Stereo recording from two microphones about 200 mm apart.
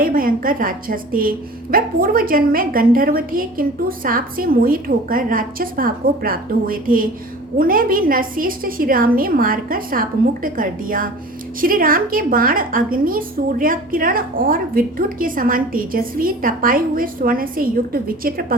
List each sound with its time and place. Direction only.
0.0 s a woman's voice: 45° right (ahead or behind)